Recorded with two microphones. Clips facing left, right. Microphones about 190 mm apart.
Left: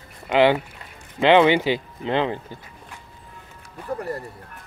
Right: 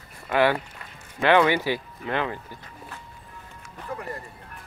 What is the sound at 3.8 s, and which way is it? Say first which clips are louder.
Speech: left 6 dB; 40° left (ahead or behind).